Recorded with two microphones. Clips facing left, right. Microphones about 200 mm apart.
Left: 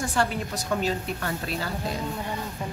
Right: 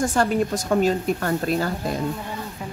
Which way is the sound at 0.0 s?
45° right (ahead or behind).